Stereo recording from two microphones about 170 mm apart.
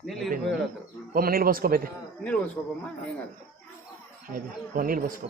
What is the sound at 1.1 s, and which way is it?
Speech, 60° right (ahead or behind).